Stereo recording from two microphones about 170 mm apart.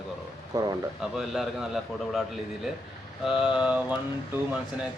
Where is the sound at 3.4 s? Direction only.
5° right (ahead or behind).